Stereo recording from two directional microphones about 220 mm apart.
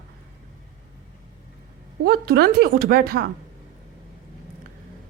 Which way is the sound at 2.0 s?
45° right (ahead or behind).